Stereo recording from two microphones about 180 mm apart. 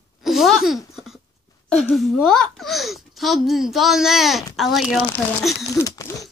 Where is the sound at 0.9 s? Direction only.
Centre (ahead or behind).